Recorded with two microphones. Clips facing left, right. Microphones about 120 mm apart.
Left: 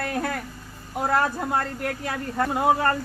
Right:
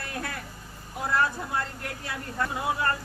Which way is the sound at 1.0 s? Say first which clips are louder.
Left 4 dB; 45° left (ahead or behind).